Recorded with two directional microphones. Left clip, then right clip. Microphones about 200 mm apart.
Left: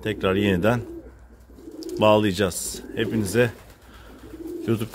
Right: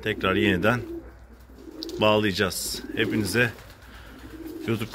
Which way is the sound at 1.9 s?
30° left (ahead or behind).